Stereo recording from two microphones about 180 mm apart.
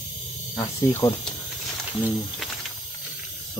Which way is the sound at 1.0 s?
15° left (ahead or behind).